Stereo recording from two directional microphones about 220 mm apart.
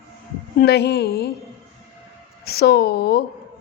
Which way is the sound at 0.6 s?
50° left (ahead or behind).